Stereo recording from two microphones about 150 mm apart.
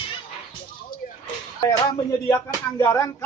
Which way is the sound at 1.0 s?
65° left (ahead or behind).